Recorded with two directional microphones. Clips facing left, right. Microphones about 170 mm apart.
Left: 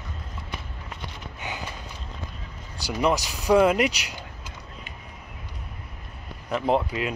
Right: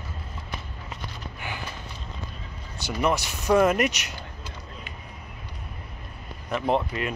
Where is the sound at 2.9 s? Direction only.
15° left (ahead or behind).